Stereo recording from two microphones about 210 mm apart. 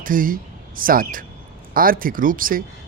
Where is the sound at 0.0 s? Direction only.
40° right (ahead or behind).